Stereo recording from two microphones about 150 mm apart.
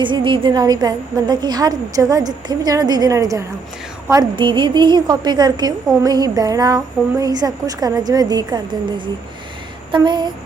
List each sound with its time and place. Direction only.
0.0 s a woman's voice: 35° right (ahead or behind)